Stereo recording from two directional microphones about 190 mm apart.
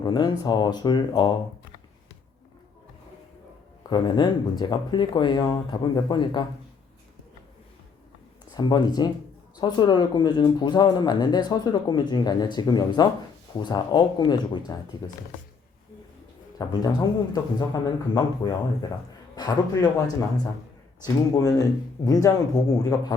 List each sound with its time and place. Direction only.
0.0 s speech: 20° left (ahead or behind)
3.8 s speech: 25° left (ahead or behind)
8.5 s speech: 20° left (ahead or behind)
16.6 s speech: 20° left (ahead or behind)